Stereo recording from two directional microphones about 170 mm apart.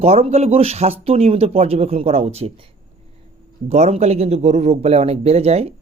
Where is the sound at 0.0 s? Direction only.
35° right (ahead or behind).